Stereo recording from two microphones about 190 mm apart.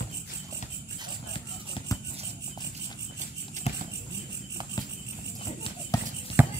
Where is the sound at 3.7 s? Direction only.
35° left (ahead or behind).